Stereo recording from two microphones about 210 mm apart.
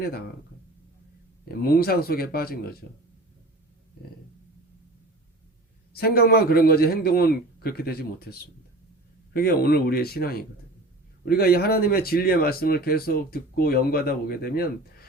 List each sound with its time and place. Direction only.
1.6 s speech: 45° left (ahead or behind)
5.9 s speech: 45° left (ahead or behind)